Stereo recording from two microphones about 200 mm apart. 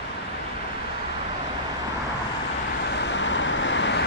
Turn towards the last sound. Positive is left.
turn(degrees=65)  # may be behind; listen again after turning